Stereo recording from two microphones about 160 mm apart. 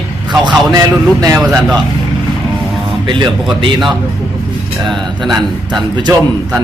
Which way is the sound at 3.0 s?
30° right (ahead or behind).